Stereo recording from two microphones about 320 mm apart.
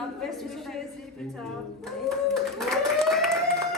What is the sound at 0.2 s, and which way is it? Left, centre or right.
Speech, centre.